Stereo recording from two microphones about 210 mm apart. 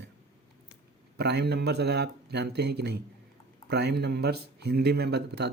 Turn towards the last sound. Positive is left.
turn(degrees=-50)  # may be behind; listen again after turning